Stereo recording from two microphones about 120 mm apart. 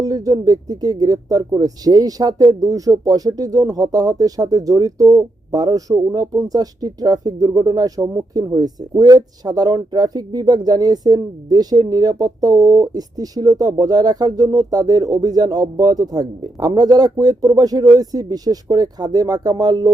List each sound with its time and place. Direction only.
0.0 s speech: 30° right (ahead or behind)